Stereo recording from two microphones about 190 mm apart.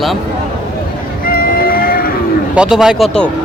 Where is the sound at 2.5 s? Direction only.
5° right (ahead or behind).